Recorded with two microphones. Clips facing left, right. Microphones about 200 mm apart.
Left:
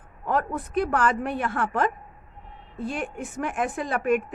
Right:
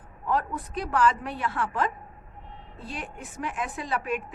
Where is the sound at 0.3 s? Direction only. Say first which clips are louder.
Left 2 dB; 55° left (ahead or behind).